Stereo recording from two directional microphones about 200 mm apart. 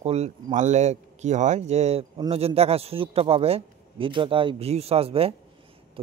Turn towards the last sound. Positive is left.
turn(degrees=-30)  # may be behind; listen again after turning